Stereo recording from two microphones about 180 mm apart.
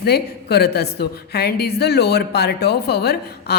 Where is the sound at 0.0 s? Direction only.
65° left (ahead or behind).